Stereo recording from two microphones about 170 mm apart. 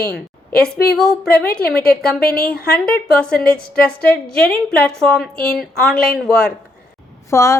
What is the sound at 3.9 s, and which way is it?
Speech, 65° left (ahead or behind).